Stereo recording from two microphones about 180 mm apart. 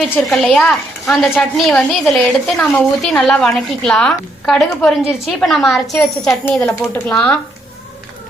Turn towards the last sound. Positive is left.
turn(degrees=10)  # may be behind; listen again after turning